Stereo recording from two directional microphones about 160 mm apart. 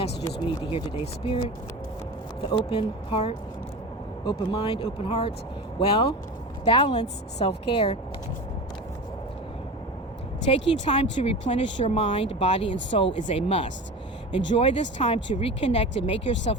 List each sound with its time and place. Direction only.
0.3 s speech: 30° left (ahead or behind)
2.5 s speech: 30° left (ahead or behind)
10.4 s speech: 45° left (ahead or behind)